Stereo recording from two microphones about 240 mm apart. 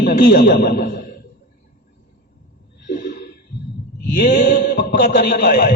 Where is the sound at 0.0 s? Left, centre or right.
Left.